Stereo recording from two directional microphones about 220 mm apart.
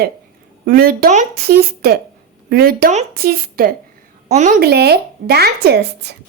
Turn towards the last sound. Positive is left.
turn(degrees=-50)  # may be behind; listen again after turning